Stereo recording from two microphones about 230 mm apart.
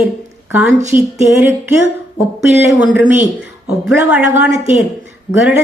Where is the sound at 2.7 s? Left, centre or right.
Centre.